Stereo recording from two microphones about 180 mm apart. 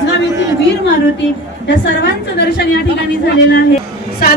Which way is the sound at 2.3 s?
65° left (ahead or behind).